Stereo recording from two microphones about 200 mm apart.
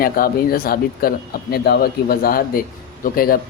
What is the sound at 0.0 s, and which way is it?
A man's voice, 50° left (ahead or behind).